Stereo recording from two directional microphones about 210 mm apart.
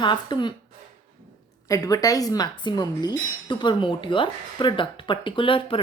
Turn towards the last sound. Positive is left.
turn(degrees=25)  # may be behind; listen again after turning